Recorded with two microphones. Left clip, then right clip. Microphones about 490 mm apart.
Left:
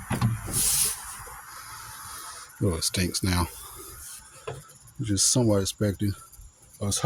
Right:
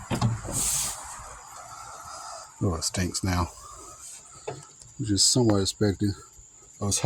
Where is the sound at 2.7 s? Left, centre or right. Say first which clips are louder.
Left 2 dB; left.